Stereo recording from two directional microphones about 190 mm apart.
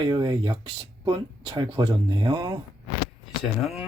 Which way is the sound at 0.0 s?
20° right (ahead or behind).